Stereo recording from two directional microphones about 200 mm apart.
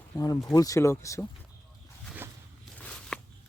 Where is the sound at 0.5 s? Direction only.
15° left (ahead or behind).